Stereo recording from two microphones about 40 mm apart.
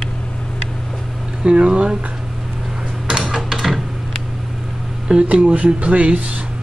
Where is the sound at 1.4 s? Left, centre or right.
Right.